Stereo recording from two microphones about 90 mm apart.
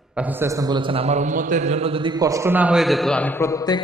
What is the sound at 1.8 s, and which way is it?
Speech, 90° right.